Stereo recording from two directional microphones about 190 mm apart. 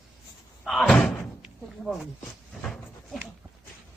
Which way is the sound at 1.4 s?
Centre (ahead or behind).